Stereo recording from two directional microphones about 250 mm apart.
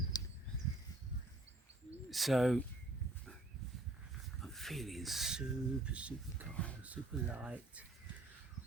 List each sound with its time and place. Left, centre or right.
0.1 s a sound: centre
2.0 s speech: centre
4.4 s speech: centre